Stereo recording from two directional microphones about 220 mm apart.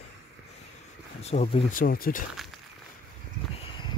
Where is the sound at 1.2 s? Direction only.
30° left (ahead or behind).